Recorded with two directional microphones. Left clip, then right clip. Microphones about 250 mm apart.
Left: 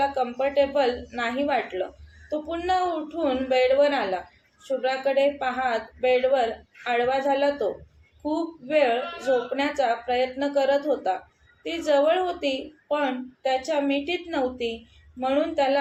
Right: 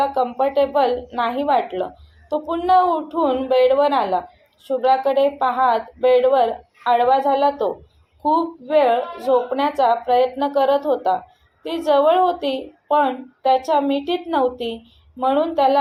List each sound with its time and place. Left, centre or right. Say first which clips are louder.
0.1 s a woman's voice: right 6 dB; centre